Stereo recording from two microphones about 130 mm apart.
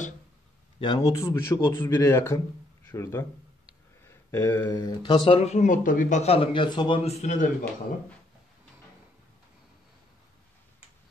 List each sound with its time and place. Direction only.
0.7 s a man's voice: 35° left (ahead or behind)
5.0 s a man's voice: 40° left (ahead or behind)
5.4 s speech: 65° left (ahead or behind); by 6.2 s 80° left
6.2 s a man's voice: 45° left (ahead or behind)
7.1 s a man's voice: 60° left (ahead or behind)